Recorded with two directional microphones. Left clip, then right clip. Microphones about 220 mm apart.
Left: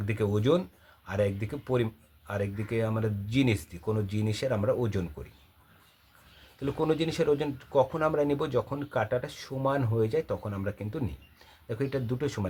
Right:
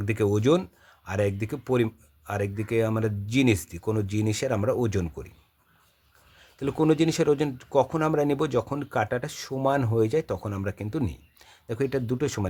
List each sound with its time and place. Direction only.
0.0 s speech: 50° right (ahead or behind)
6.6 s speech: 50° right (ahead or behind)